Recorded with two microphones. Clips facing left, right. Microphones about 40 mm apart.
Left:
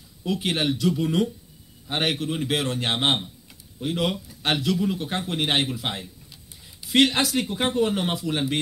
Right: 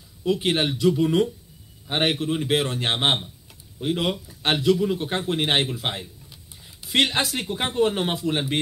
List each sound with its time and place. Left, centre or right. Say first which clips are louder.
0.3 s speech: right 2 dB; right